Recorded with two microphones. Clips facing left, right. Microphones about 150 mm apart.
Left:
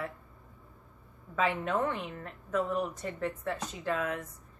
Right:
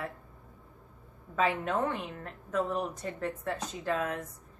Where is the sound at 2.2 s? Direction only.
35° right (ahead or behind).